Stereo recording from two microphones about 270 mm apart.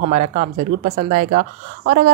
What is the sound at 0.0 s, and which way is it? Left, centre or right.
A woman's voice, right.